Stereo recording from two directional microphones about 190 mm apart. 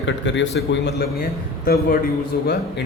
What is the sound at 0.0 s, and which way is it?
A man's voice, 70° left (ahead or behind).